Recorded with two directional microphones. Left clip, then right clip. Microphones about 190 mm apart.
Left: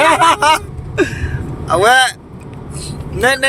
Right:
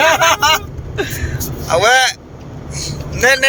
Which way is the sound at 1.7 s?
30° left (ahead or behind).